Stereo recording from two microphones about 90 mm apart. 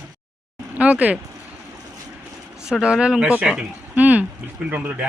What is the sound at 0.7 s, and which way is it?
Speech, 15° right (ahead or behind).